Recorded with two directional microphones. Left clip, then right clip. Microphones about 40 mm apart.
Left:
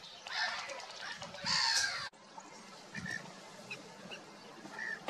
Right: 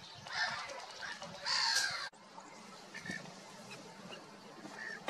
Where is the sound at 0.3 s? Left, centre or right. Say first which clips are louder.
Left 1 dB; centre.